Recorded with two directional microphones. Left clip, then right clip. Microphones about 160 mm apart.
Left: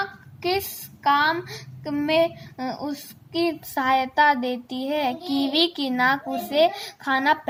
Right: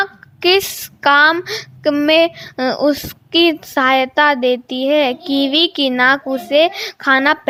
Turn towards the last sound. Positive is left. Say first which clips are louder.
# right 8 dB
turn(degrees=-45)  # may be behind; listen again after turning